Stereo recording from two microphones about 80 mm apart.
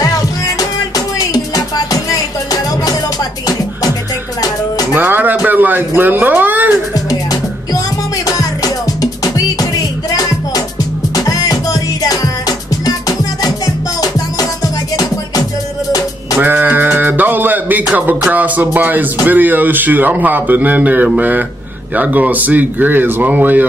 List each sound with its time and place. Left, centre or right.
0.6 s music: left
4.9 s music: right
5.5 s speech: right
6.9 s music: left
11.1 s music: left
14.0 s music: left
16.3 s music: right
18.3 s speech: right